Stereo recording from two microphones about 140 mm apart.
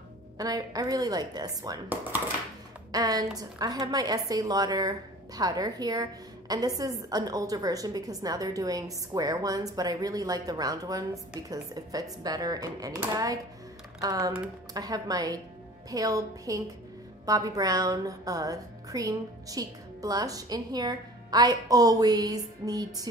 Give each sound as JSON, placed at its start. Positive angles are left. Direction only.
{"t": 0.4, "sound": "a woman's voice", "side_deg": -25}
{"t": 2.9, "sound": "a woman's voice", "side_deg": -25}